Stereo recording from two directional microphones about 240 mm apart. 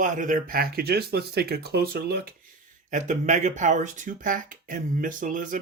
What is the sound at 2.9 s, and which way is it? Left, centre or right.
Speech, right.